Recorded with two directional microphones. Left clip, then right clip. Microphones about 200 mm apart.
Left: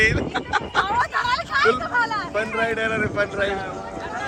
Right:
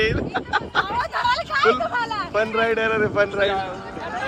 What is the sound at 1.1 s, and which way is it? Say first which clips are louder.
Vehicle: right 1 dB; 25° right (ahead or behind).